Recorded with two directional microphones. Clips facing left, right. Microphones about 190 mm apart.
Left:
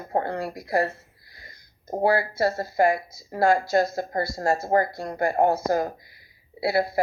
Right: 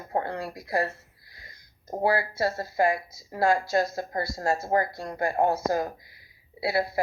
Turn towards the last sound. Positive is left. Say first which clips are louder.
# left 3 dB
turn(degrees=30)  # may be behind; listen again after turning